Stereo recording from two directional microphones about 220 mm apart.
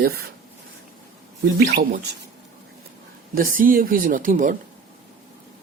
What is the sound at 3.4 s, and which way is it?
Speech, 40° right (ahead or behind).